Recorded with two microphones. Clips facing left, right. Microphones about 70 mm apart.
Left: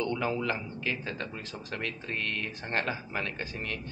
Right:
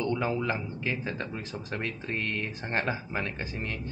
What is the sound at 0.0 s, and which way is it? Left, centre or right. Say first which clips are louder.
Speech: right 1 dB; centre.